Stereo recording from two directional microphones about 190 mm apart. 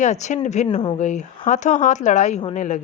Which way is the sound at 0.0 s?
40° left (ahead or behind).